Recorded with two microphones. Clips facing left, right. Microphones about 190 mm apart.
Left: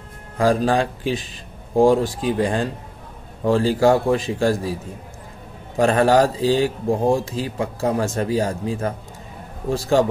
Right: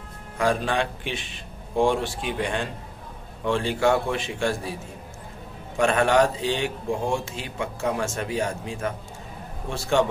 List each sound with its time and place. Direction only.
0.4 s speech: 35° left (ahead or behind)
5.8 s speech: 35° left (ahead or behind)